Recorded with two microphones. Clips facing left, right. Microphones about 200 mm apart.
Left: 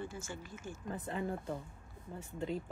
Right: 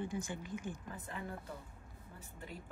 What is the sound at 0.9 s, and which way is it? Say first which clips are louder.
Speech: left 7 dB; 25° left (ahead or behind).